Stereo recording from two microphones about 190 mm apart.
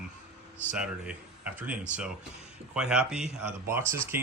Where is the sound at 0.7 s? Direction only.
5° right (ahead or behind).